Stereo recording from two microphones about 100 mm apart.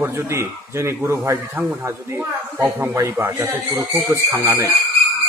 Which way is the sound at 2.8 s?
20° right (ahead or behind).